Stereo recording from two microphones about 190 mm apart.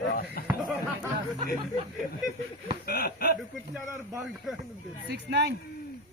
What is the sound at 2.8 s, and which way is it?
Speech, 55° left (ahead or behind).